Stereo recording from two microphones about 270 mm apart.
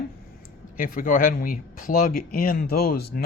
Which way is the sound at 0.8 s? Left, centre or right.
Left.